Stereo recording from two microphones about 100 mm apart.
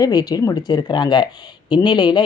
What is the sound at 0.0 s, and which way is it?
Speech, 40° left (ahead or behind).